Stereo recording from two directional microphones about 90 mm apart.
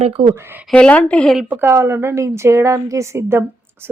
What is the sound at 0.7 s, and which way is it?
Speech, 15° left (ahead or behind).